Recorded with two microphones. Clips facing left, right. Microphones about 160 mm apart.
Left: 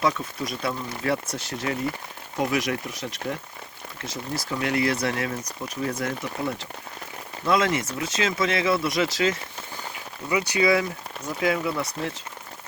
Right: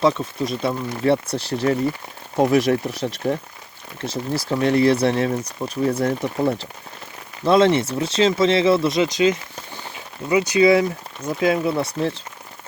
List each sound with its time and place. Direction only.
0.0 s speech: 25° right (ahead or behind)